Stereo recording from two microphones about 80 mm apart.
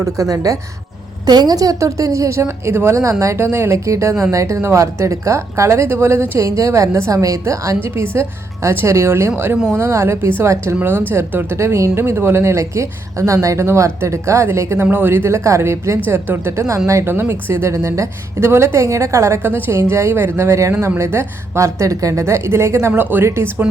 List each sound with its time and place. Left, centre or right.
0.0 s speech: right
1.3 s speech: right
7.8 s speech: right